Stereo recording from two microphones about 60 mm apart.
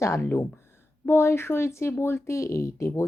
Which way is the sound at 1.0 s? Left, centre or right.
Left.